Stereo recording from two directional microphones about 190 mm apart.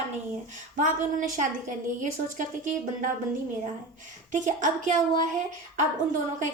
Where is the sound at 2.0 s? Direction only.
40° right (ahead or behind).